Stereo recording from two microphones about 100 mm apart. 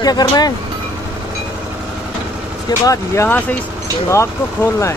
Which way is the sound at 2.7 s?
45° left (ahead or behind).